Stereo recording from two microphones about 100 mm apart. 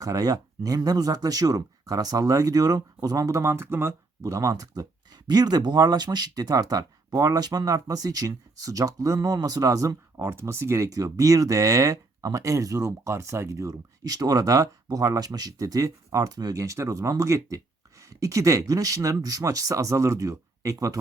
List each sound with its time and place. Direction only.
0.0 s speech: 35° right (ahead or behind)
4.2 s speech: 35° right (ahead or behind)